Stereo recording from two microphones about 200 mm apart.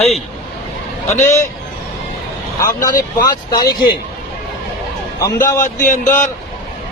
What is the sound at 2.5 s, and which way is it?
A man's voice, 15° left (ahead or behind).